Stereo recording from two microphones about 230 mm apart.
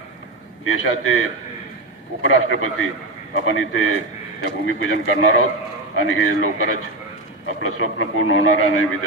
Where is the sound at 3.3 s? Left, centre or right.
Left.